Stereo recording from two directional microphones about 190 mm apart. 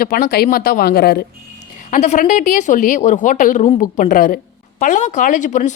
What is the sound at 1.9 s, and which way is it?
Speech, 40° left (ahead or behind).